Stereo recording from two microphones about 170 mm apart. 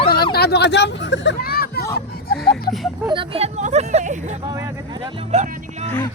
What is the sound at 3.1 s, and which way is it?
Speech, 30° right (ahead or behind).